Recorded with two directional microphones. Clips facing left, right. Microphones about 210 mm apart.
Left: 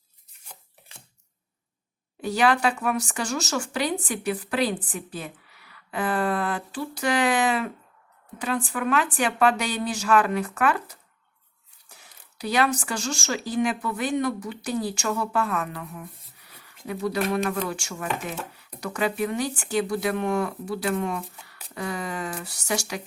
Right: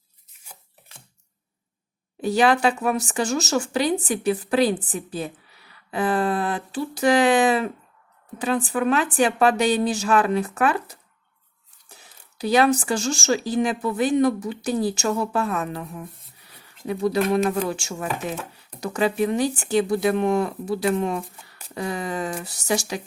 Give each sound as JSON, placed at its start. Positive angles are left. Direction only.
{"t": 0.3, "sound": "scissors", "side_deg": -10}
{"t": 2.2, "sound": "speech", "side_deg": -25}
{"t": 12.4, "sound": "speech", "side_deg": -25}
{"t": 16.6, "sound": "a sound", "side_deg": -25}
{"t": 17.3, "sound": "speech", "side_deg": -25}